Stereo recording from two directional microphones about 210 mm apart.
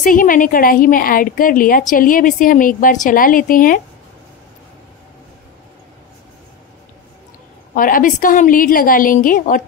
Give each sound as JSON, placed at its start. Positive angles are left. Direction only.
{"t": 0.0, "sound": "a woman's voice", "side_deg": 40}
{"t": 7.7, "sound": "a woman's voice", "side_deg": 40}